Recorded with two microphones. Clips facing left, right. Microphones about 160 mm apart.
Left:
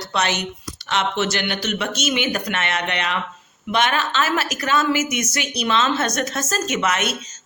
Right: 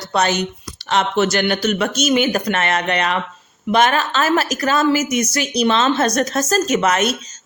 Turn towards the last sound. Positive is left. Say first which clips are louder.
# right 5 dB
turn(degrees=-40)  # may be behind; listen again after turning